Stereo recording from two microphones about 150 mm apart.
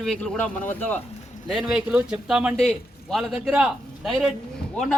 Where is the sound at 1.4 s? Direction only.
5° right (ahead or behind).